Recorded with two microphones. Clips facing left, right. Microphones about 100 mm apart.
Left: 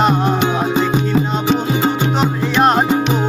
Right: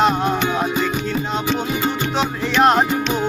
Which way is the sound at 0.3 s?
25° left (ahead or behind).